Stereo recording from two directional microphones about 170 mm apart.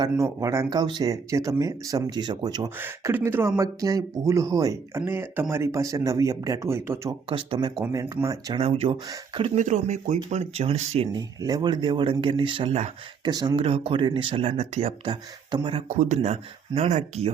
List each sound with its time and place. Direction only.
0.0 s speech: 20° right (ahead or behind)
2.8 s speech: 10° right (ahead or behind)
7.3 s speech: 30° right (ahead or behind)
7.9 s speech: 20° right (ahead or behind)
8.5 s speech: 35° right (ahead or behind)
11.2 s speech: 25° right (ahead or behind)
13.2 s speech: 25° right (ahead or behind)
15.9 s speech: 45° right (ahead or behind)